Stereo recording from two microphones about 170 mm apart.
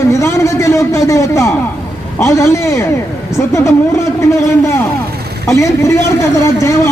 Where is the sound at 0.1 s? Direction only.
15° left (ahead or behind).